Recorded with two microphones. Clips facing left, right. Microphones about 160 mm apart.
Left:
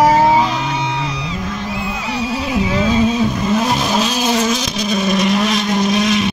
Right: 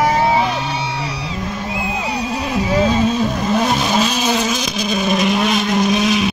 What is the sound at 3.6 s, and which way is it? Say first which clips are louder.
Vehicle: even; centre (ahead or behind).